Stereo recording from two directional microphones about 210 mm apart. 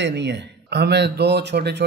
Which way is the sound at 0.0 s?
55° right (ahead or behind).